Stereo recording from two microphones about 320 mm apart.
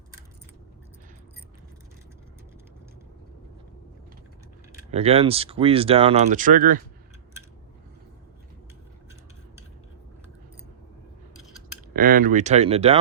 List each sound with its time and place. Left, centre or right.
4.9 s speech: centre
11.9 s speech: right